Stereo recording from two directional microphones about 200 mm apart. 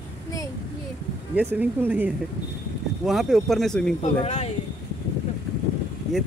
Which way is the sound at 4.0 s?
35° left (ahead or behind).